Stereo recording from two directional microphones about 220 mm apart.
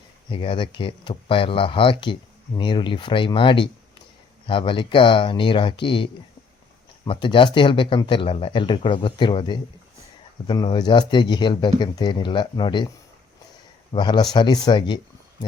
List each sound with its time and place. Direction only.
0.3 s speech: 20° left (ahead or behind)
13.9 s speech: 20° left (ahead or behind)